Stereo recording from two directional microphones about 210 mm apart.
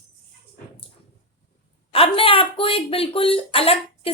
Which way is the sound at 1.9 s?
25° left (ahead or behind).